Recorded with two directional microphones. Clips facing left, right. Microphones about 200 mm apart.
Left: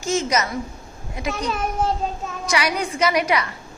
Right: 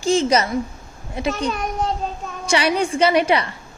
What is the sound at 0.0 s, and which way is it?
Speech, 30° right (ahead or behind).